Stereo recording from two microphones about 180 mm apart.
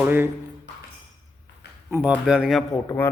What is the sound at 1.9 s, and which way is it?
Speech, 10° right (ahead or behind).